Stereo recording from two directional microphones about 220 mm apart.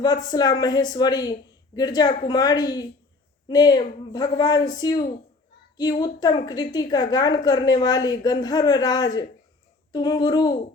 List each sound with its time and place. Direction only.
0.0 s speech: 20° left (ahead or behind)